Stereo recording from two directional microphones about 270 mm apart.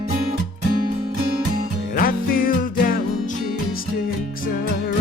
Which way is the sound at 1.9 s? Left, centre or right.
Left.